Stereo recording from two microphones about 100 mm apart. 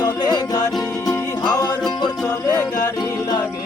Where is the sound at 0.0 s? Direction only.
40° left (ahead or behind).